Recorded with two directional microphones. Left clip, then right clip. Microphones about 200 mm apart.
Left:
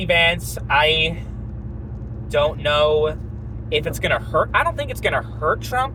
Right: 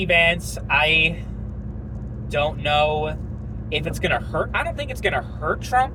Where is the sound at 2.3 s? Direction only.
30° left (ahead or behind).